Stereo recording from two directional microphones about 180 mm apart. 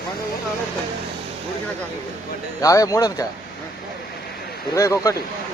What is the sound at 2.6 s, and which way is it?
Speech, 20° left (ahead or behind).